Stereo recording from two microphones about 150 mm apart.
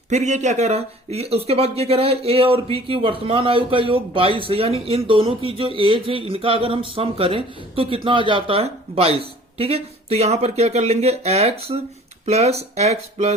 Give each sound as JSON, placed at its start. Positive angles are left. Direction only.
{"t": 0.1, "sound": "speech", "side_deg": -50}